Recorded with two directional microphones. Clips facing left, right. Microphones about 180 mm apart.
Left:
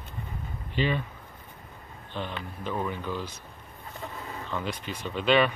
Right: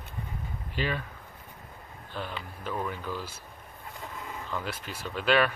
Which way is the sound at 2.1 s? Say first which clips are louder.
Left 2 dB; 5° right (ahead or behind).